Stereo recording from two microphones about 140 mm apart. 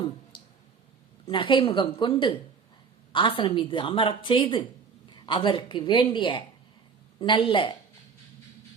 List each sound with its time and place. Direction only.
0.3 s clicking: 35° left (ahead or behind)
1.3 s a woman's voice: 35° left (ahead or behind)